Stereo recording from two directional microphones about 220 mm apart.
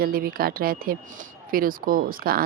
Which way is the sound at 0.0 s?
40° right (ahead or behind).